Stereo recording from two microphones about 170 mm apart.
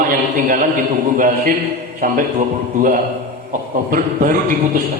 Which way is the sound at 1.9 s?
50° right (ahead or behind).